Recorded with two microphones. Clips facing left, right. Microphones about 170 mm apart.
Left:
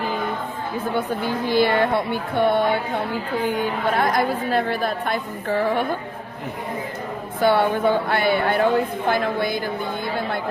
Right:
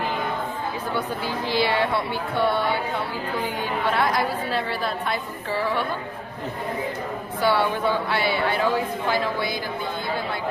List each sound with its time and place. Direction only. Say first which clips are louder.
0.9 s a woman's voice: left 5 dB; 50° left (ahead or behind)
3.9 s a woman's voice: left 3 dB; 45° left (ahead or behind)
7.4 s a woman's voice: left 4 dB; 50° left (ahead or behind)